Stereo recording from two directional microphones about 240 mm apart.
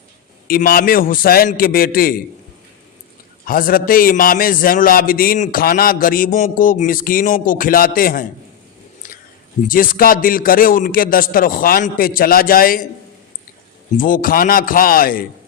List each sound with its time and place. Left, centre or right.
0.4 s a man's voice: left
3.4 s a man's voice: left
9.0 s a sound: left
9.6 s a man's voice: left
13.9 s a man's voice: left